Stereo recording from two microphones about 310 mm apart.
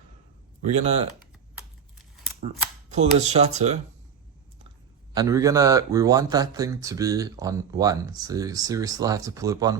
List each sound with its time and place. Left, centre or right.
0.7 s speech: right
2.9 s speech: right
5.1 s speech: centre